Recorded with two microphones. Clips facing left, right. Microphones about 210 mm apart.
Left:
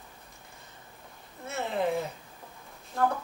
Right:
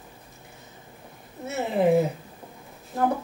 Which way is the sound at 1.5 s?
10° right (ahead or behind).